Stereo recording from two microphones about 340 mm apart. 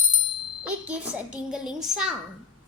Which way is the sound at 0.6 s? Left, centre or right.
Centre.